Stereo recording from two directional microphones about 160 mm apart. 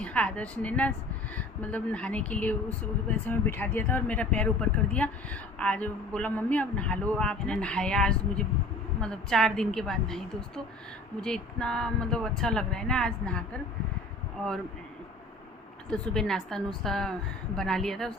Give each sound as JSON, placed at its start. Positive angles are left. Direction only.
{"t": 0.0, "sound": "a man's voice", "side_deg": 10}
{"t": 15.9, "sound": "a woman's voice", "side_deg": 5}